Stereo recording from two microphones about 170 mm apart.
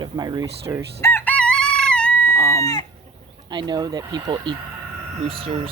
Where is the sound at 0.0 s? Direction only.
25° right (ahead or behind).